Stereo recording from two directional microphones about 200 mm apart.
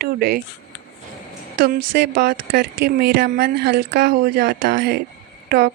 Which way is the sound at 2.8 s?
55° right (ahead or behind).